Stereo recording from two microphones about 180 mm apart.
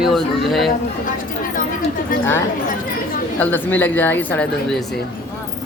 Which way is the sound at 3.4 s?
10° left (ahead or behind).